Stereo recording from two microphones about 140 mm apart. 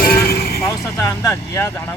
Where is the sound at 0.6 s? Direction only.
25° left (ahead or behind).